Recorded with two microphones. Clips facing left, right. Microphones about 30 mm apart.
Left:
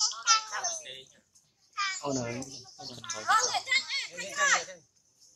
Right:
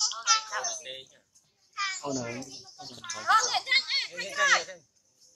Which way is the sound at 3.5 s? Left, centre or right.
Right.